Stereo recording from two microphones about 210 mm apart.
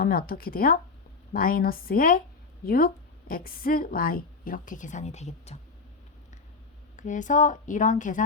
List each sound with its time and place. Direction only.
0.0 s a woman's voice: 45° left (ahead or behind)
6.9 s speech: 35° left (ahead or behind)